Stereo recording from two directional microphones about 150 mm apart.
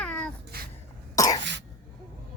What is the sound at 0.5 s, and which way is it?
Throat clearing, 85° right.